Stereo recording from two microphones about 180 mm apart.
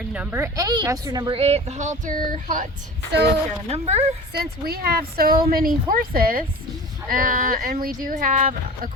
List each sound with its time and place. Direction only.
0.1 s speech: 10° right (ahead or behind)
1.4 s speech: 35° right (ahead or behind)
3.7 s speech: 35° right (ahead or behind)
4.4 s speech: 60° right (ahead or behind)